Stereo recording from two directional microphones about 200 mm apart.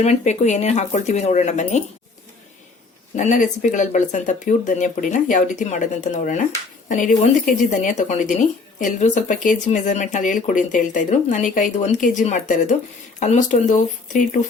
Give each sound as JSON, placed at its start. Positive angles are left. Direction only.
{"t": 0.0, "sound": "speech", "side_deg": 35}
{"t": 3.2, "sound": "speech", "side_deg": 40}